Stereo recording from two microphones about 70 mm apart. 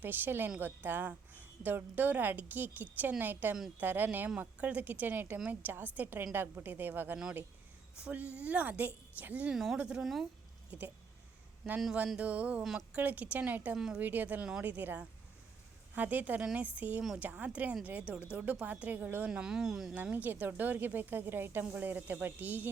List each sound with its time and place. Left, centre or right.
0.0 s a woman's voice: right
8.0 s a woman's voice: centre
9.5 s speech: centre
9.7 s speech: centre
10.0 s speech: centre
10.7 s speech: right
12.0 s a woman's voice: centre
13.7 s speech: centre
14.0 s a woman's voice: right
19.3 s speech: centre
19.9 s a woman's voice: right